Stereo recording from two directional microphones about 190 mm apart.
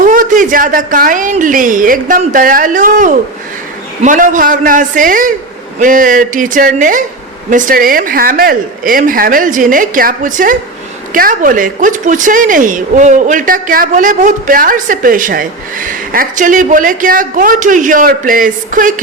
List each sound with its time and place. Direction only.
0.0 s speech: 45° right (ahead or behind)